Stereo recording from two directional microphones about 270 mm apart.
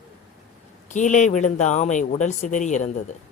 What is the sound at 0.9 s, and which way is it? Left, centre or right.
Speech, left.